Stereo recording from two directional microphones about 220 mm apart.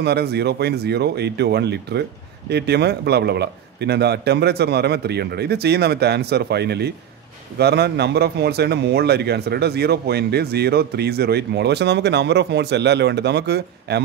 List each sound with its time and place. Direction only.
0.0 s a man's voice: 50° right (ahead or behind)